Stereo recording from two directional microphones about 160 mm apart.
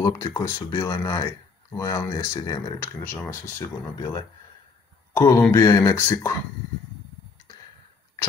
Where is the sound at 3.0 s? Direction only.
15° left (ahead or behind).